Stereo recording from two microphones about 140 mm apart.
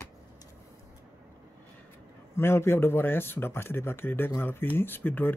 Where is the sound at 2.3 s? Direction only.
15° left (ahead or behind).